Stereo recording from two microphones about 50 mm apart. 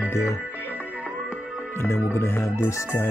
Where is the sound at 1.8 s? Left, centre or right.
Left.